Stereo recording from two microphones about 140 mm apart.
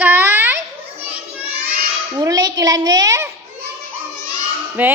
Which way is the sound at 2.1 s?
25° right (ahead or behind).